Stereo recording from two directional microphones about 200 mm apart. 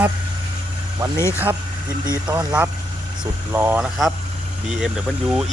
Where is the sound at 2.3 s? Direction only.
20° right (ahead or behind).